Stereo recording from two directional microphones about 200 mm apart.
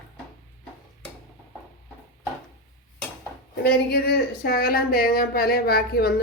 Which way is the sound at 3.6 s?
55° left (ahead or behind).